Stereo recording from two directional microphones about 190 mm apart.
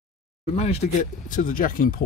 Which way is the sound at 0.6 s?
40° left (ahead or behind).